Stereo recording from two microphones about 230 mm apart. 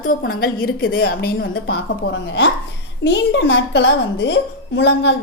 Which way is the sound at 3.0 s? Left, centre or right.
Left.